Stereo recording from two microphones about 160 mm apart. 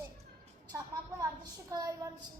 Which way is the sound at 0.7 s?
20° right (ahead or behind).